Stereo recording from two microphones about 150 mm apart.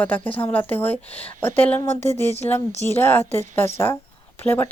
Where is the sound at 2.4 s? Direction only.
15° left (ahead or behind).